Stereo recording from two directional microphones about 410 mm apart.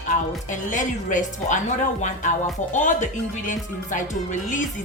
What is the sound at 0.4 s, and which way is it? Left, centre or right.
A woman's voice, centre.